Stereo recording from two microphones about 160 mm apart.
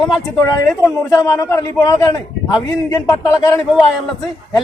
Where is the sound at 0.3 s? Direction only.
20° left (ahead or behind).